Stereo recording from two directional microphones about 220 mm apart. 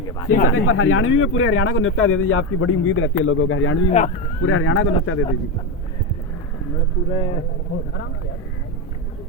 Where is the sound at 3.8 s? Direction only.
30° left (ahead or behind).